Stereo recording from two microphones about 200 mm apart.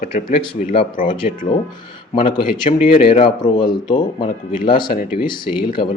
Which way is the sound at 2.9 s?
45° left (ahead or behind).